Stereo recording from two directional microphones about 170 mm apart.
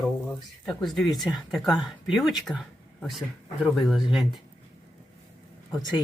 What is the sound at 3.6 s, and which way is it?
Speech, centre (ahead or behind).